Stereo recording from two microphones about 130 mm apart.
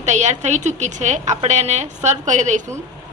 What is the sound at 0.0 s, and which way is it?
A woman's voice, 65° right (ahead or behind).